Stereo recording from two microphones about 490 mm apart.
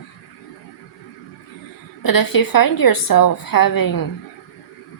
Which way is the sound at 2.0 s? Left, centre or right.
Left.